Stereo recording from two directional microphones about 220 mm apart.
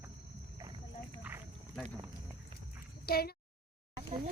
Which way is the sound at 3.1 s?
45° left (ahead or behind).